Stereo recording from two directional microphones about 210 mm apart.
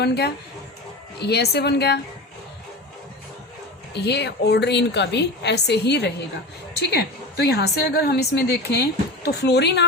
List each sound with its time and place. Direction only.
0.0 s a woman's voice: 50° left (ahead or behind)
3.9 s a woman's voice: 55° left (ahead or behind)